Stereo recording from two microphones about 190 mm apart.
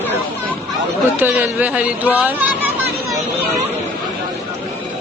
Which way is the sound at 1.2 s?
10° right (ahead or behind).